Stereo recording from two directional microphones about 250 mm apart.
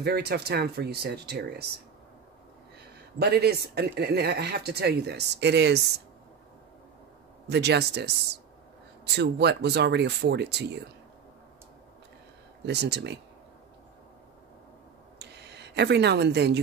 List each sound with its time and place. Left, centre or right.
0.0 s a man's voice: right
3.2 s a man's voice: right
7.4 s a man's voice: right
12.6 s a man's voice: right
15.1 s a sound: right